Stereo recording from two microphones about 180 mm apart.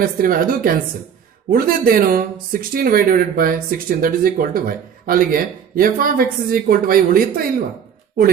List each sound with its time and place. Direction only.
0.0 s speech: 50° right (ahead or behind)